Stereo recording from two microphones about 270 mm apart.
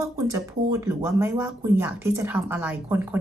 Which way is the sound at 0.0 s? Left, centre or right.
Centre.